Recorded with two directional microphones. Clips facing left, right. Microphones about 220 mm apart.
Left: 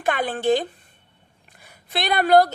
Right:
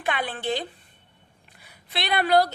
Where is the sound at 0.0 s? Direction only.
45° left (ahead or behind).